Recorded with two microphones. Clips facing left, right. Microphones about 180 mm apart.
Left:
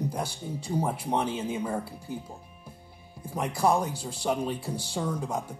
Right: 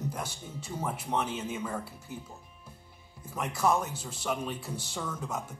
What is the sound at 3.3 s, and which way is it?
Speech, 35° left (ahead or behind).